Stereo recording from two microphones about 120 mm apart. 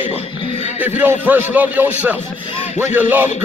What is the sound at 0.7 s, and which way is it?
A man's voice, 15° right (ahead or behind).